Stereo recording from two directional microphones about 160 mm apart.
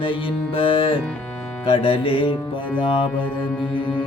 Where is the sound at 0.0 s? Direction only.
35° left (ahead or behind).